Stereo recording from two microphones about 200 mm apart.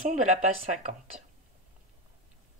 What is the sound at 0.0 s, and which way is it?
Speech, 35° right (ahead or behind).